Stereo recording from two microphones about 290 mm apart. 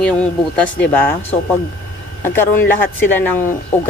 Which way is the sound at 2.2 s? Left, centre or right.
Centre.